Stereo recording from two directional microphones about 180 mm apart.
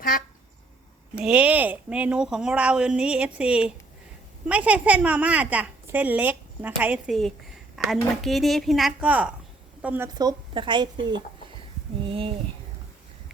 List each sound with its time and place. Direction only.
1.1 s a woman's voice: 5° right (ahead or behind)
10.2 s a woman's voice: 25° right (ahead or behind)
12.0 s speech: 30° right (ahead or behind)